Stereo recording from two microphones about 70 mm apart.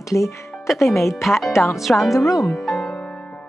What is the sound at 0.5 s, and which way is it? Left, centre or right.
Speech, centre.